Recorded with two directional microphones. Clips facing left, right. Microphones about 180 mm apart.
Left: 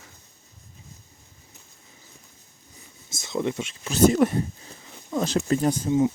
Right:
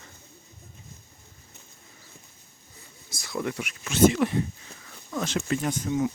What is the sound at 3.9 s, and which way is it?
Speech, 40° left (ahead or behind).